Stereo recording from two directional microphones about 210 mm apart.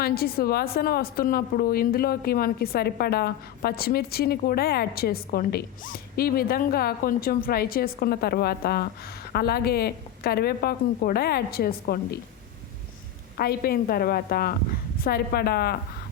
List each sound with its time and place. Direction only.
0.0 s a woman's voice: 45° left (ahead or behind)
13.3 s a woman's voice: 45° left (ahead or behind)